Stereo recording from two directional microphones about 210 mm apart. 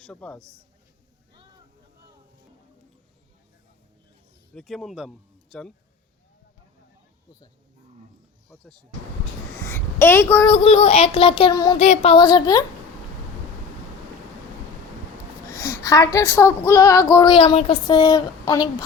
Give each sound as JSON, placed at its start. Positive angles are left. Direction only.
{"t": 0.0, "sound": "a man's voice", "side_deg": 5}
{"t": 4.5, "sound": "speech", "side_deg": 0}
{"t": 9.6, "sound": "a sound", "side_deg": 10}
{"t": 10.4, "sound": "child singing", "side_deg": 25}
{"t": 11.8, "sound": "child singing", "side_deg": 30}
{"t": 15.4, "sound": "a sound", "side_deg": 10}
{"t": 16.1, "sound": "female singing", "side_deg": 10}